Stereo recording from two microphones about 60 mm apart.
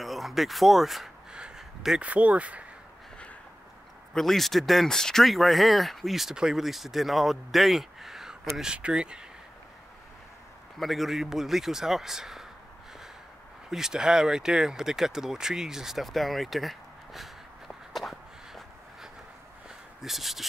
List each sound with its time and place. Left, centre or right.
0.0 s speech: centre
1.3 s a sound: centre
2.0 s speech: right
4.1 s speech: centre
10.8 s speech: centre
13.7 s speech: centre